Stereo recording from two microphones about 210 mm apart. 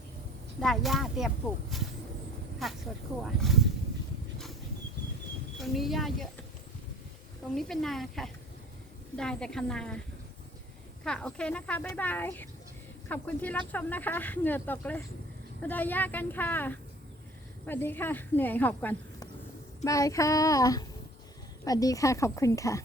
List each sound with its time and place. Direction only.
0.6 s a woman's voice: centre (ahead or behind)
5.5 s a woman's voice: centre (ahead or behind)
7.5 s a woman's voice: centre (ahead or behind)
11.0 s a woman's voice: 5° left (ahead or behind)